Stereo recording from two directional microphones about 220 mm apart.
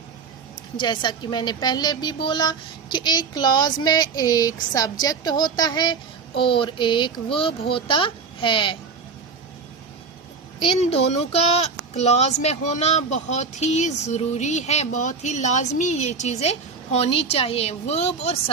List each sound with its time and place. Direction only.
0.8 s a woman's voice: 20° left (ahead or behind)
10.6 s speech: 25° left (ahead or behind)